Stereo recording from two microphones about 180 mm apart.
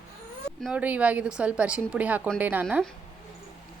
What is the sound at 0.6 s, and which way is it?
A woman's voice, centre (ahead or behind).